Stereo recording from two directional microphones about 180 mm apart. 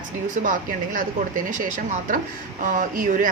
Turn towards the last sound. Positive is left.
turn(degrees=-50)  # may be behind; listen again after turning